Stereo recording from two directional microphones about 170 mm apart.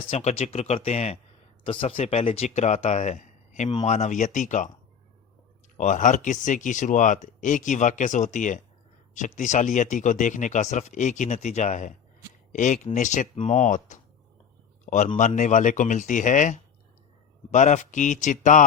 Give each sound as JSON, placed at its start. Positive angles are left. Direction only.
{"t": 0.1, "sound": "speech", "side_deg": 40}
{"t": 5.7, "sound": "speech", "side_deg": 50}